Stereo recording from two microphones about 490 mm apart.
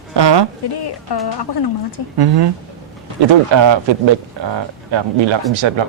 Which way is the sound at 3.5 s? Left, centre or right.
Right.